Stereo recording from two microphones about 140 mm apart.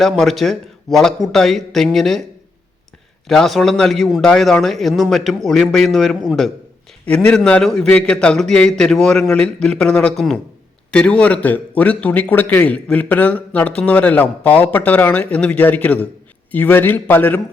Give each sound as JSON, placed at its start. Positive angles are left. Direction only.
{"t": 0.0, "sound": "a man's voice", "side_deg": 0}
{"t": 3.2, "sound": "a man's voice", "side_deg": 0}